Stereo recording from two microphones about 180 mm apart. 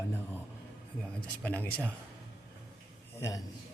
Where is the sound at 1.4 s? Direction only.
10° left (ahead or behind).